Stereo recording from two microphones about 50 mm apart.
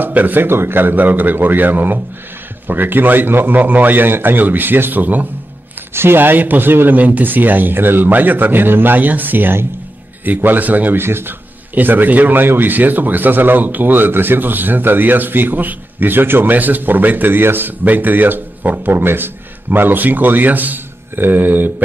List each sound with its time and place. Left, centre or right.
0.0 s a man's voice: right
5.0 s a man's voice: right
5.9 s a man's voice: right
11.0 s speech: right
11.7 s a man's voice: right